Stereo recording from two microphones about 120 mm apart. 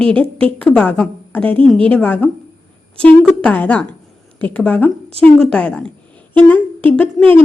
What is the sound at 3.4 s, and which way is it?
A woman's voice, 10° left (ahead or behind).